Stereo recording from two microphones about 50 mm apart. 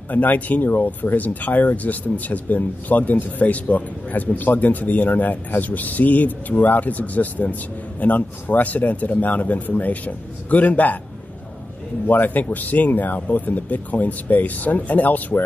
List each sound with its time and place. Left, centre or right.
0.1 s speech: left
12.1 s speech: left